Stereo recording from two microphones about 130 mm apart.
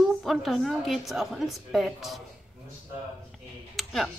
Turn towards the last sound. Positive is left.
turn(degrees=0)  # may be behind; listen again after turning